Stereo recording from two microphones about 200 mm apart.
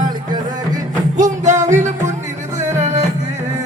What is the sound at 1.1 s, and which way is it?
Music, 35° right (ahead or behind).